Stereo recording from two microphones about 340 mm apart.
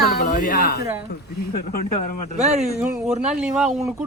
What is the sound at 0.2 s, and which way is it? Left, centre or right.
Speech, left.